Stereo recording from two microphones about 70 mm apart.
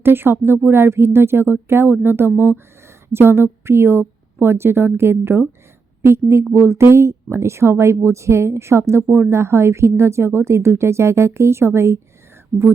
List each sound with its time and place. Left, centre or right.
0.0 s speech: right